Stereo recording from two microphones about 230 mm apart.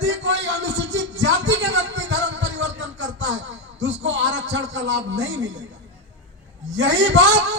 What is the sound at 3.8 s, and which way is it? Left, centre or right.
A man's voice, right.